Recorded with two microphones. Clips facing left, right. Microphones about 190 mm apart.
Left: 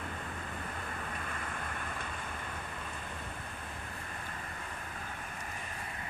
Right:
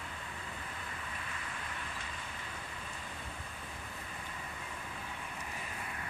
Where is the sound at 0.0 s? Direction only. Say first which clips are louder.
Left 5 dB; 50° left (ahead or behind).